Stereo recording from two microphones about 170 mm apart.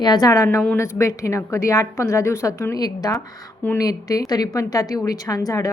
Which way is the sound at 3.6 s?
10° left (ahead or behind).